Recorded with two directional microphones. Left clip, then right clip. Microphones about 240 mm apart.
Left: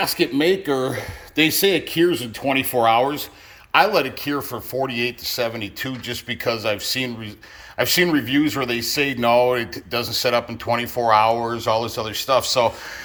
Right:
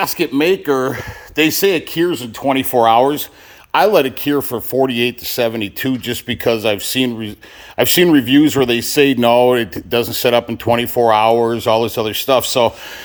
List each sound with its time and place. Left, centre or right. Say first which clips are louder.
0.0 s speech: right 4 dB; centre; by 12.7 s right